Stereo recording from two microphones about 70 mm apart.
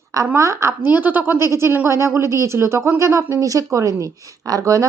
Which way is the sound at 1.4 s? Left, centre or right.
Right.